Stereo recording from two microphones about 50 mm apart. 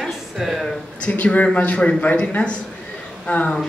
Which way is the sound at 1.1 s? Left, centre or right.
Left.